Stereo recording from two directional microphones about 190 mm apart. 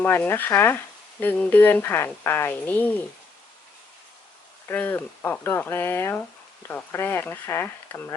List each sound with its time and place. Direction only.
0.0 s speech: 10° left (ahead or behind)
4.7 s speech: 10° left (ahead or behind)